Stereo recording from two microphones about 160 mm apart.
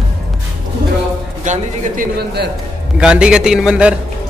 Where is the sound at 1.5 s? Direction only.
50° right (ahead or behind).